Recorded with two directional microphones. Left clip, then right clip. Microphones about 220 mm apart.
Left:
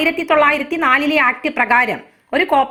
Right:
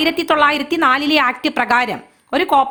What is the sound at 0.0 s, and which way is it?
A woman's voice, 25° right (ahead or behind).